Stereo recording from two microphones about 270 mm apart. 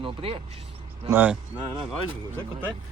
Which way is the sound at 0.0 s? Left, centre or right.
Right.